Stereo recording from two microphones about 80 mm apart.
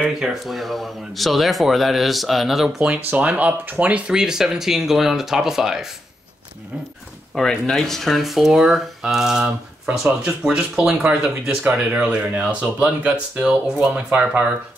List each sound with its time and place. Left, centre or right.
0.0 s speech: centre
3.1 s speech: centre
4.1 s speech: centre
7.3 s speech: centre